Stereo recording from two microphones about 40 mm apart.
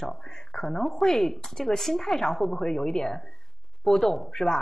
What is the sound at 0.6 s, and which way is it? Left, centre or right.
Speech, centre.